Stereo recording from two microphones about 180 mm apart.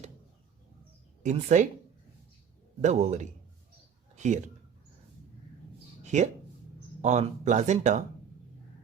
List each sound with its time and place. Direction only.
1.2 s speech: 40° right (ahead or behind)
2.8 s speech: 40° right (ahead or behind)
4.1 s a sound: 40° right (ahead or behind)
6.1 s speech: 40° right (ahead or behind)